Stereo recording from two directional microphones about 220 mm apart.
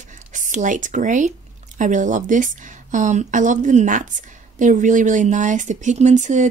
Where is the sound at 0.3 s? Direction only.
35° right (ahead or behind).